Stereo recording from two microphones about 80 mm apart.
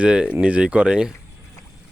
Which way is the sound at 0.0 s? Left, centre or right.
Centre.